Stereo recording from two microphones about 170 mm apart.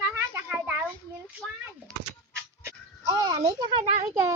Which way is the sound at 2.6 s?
25° right (ahead or behind).